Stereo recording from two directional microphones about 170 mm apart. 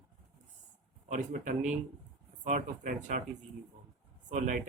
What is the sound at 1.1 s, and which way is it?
Speech, 50° right (ahead or behind).